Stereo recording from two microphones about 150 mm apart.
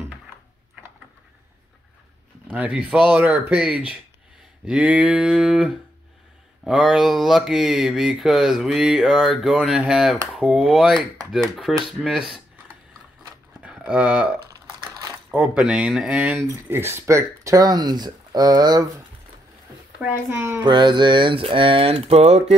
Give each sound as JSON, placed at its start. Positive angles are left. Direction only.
{"t": 2.4, "sound": "speech", "side_deg": -10}
{"t": 13.6, "sound": "a sound", "side_deg": -5}
{"t": 15.4, "sound": "speech", "side_deg": -5}
{"t": 20.0, "sound": "speech", "side_deg": -15}
{"t": 20.6, "sound": "speech", "side_deg": -30}